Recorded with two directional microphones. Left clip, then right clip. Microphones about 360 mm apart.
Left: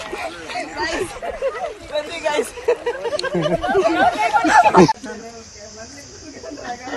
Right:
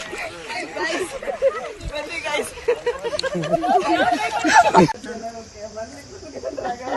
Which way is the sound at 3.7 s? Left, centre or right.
Centre.